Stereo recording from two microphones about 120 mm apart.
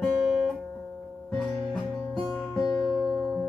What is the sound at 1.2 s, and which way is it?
Music, centre (ahead or behind).